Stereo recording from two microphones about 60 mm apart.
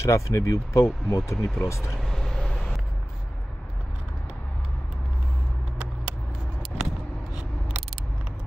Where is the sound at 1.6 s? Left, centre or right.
Left.